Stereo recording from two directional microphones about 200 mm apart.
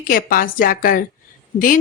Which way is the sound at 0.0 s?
45° left (ahead or behind).